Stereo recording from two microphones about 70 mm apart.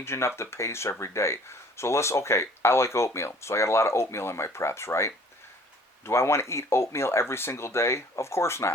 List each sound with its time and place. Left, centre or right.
0.0 s speech: left